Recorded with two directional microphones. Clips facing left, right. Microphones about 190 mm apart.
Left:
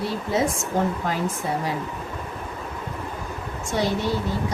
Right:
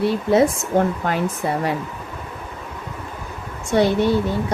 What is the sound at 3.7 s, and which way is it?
Speech, 60° right (ahead or behind).